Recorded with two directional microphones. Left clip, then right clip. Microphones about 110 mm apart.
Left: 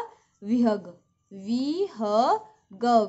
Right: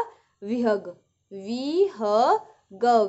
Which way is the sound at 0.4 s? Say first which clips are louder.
Right 1 dB; 25° left (ahead or behind).